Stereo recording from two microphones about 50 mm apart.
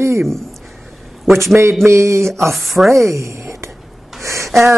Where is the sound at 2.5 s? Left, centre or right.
Centre.